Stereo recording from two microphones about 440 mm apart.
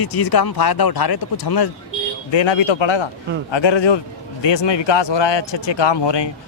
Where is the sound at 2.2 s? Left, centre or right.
Left.